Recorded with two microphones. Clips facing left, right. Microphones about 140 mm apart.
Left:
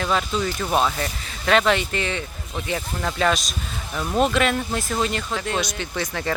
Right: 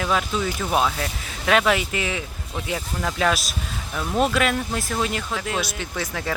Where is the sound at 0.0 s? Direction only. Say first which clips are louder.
Even; 5° right (ahead or behind).